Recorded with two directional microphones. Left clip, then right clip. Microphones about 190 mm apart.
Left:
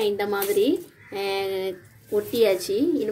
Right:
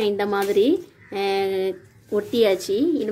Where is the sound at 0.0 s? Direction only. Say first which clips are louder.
Right 2 dB; 30° right (ahead or behind).